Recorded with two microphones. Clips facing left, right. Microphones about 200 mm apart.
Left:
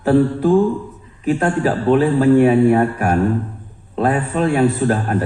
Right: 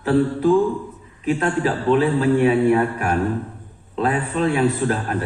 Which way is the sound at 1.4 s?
55° left (ahead or behind).